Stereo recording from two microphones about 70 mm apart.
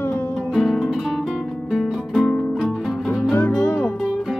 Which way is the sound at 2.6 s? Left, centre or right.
Centre.